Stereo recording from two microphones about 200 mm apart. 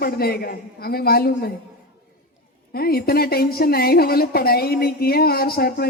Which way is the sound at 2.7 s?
50° left (ahead or behind).